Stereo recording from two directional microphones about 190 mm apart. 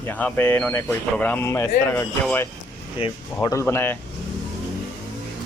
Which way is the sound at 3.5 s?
15° left (ahead or behind).